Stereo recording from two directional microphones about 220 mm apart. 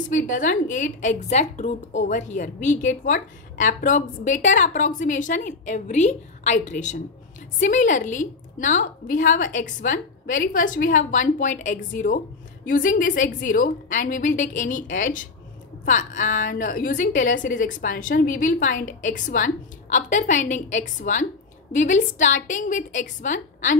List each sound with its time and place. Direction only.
0.1 s a woman's voice: 35° left (ahead or behind)